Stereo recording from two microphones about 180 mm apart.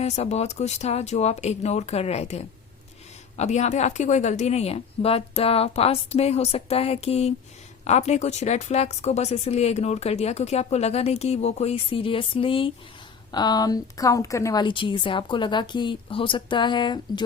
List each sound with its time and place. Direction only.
0.0 s a woman's voice: 35° left (ahead or behind)